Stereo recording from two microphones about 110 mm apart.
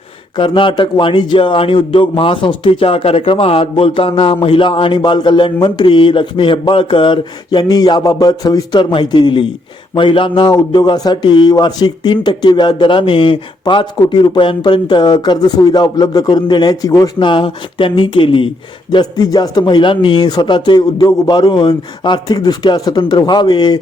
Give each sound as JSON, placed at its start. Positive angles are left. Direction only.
{"t": 0.3, "sound": "speech", "side_deg": 50}
{"t": 7.6, "sound": "a man's voice", "side_deg": 35}
{"t": 17.2, "sound": "speech", "side_deg": 50}